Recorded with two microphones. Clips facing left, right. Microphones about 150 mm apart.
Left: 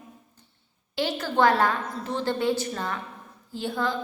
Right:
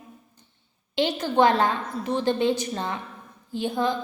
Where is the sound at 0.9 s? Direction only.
20° right (ahead or behind).